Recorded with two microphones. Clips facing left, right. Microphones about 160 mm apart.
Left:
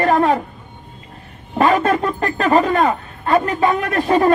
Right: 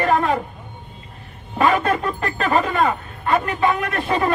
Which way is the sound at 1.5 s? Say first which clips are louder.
Left 3 dB; 40° left (ahead or behind).